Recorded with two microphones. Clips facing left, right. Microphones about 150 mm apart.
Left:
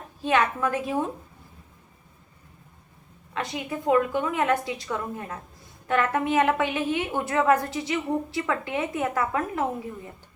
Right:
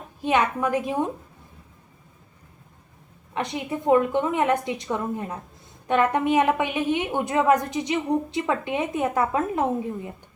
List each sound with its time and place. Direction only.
0.2 s a woman's voice: 15° right (ahead or behind)
3.3 s a woman's voice: 20° right (ahead or behind)